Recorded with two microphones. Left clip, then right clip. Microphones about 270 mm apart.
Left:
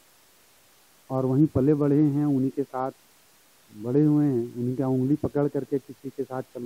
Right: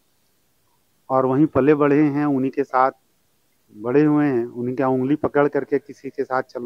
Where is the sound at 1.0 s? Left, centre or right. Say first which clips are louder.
Right 7 dB; centre.